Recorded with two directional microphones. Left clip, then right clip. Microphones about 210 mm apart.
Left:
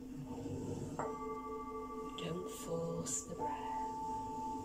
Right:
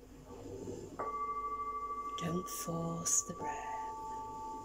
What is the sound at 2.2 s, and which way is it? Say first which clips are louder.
Speech: right 3 dB; 30° right (ahead or behind).